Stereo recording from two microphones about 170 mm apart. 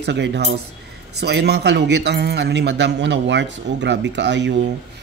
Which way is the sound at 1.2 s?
75° right (ahead or behind).